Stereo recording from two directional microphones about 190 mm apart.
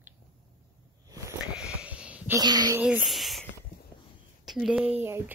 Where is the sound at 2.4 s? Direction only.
20° right (ahead or behind).